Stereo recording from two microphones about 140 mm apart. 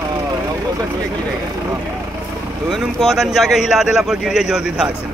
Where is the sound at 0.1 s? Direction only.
25° right (ahead or behind).